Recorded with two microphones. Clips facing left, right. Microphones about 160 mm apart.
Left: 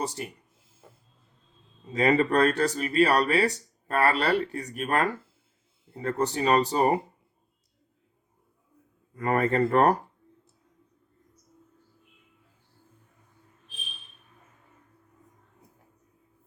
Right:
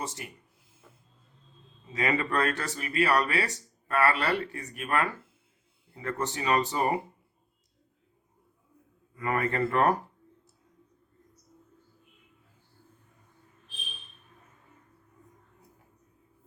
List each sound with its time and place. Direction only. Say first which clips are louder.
0.0 s speech: left 6 dB; 35° left (ahead or behind)
1.9 s speech: left 6 dB; 35° left (ahead or behind)
9.1 s speech: left 5 dB; 40° left (ahead or behind)